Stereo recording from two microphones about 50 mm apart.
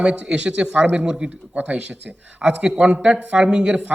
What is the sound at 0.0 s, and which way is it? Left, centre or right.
Speech, right.